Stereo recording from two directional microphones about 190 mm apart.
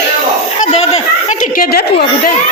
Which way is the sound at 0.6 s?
35° left (ahead or behind).